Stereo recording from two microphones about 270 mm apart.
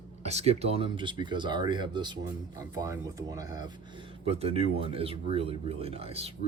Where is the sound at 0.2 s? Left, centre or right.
Right.